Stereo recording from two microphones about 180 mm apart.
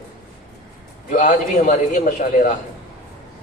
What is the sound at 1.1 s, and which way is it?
Speech, 45° left (ahead or behind).